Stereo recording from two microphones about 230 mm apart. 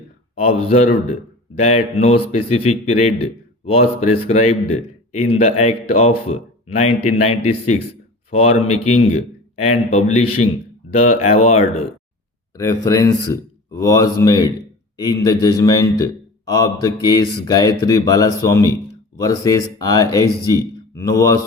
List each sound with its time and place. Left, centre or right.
0.3 s a man's voice: left
12.5 s a man's voice: centre